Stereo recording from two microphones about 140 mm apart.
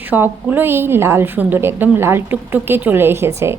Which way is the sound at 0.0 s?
15° right (ahead or behind).